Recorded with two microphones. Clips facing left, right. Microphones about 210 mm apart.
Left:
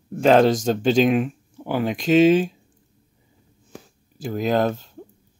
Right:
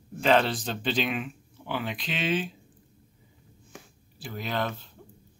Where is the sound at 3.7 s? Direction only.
45° left (ahead or behind).